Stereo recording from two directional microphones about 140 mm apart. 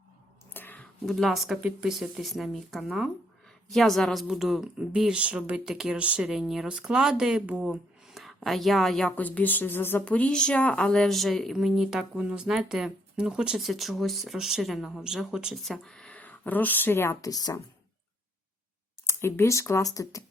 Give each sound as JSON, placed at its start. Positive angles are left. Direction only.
{"t": 0.5, "sound": "a sound", "side_deg": 15}
{"t": 1.0, "sound": "speech", "side_deg": 0}
{"t": 19.0, "sound": "speech", "side_deg": 20}